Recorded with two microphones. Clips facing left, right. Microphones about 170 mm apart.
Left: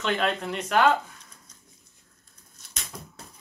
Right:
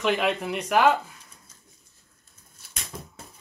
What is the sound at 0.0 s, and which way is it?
Speech, 5° right (ahead or behind).